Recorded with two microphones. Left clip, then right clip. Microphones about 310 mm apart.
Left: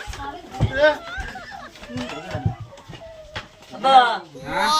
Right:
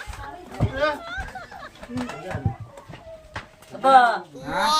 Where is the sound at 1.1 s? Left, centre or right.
Centre.